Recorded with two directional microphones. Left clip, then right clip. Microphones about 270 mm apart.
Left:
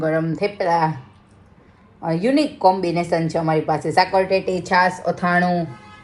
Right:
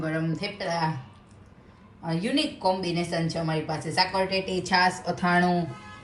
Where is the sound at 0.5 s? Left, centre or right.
Centre.